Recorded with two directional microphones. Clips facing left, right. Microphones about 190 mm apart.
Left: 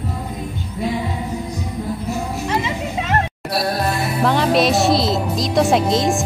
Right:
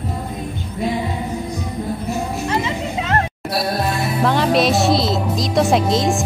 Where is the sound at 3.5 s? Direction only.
Centre (ahead or behind).